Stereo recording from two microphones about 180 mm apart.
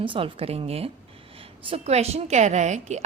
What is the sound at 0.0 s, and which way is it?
A woman's voice, 30° right (ahead or behind).